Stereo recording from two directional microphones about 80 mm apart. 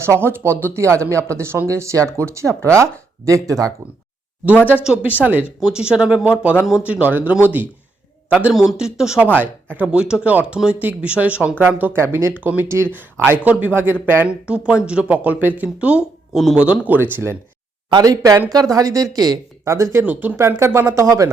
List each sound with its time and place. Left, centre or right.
0.0 s speech: right
5.2 s speech: centre
5.5 s a man's voice: centre
8.5 s speech: centre; by 12.3 s right
12.4 s speech: right
14.7 s speech: centre
16.3 s speech: centre
16.6 s speech: centre
17.9 s a woman's voice: right
20.1 s speech: right